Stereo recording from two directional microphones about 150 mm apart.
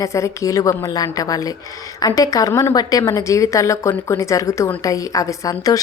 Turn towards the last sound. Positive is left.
turn(degrees=25)  # may be behind; listen again after turning